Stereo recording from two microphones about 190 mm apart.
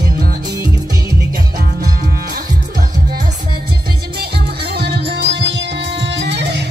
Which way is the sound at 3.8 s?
55° right (ahead or behind).